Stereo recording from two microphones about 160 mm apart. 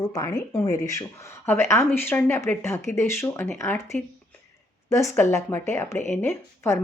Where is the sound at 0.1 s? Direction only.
20° left (ahead or behind).